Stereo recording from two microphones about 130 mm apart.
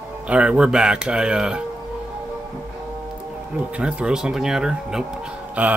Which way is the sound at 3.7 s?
5° right (ahead or behind).